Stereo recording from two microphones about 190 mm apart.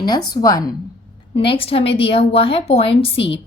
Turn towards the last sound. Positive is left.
turn(degrees=30)  # may be behind; listen again after turning